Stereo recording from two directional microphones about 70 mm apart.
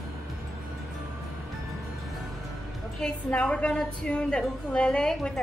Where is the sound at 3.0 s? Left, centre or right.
Centre.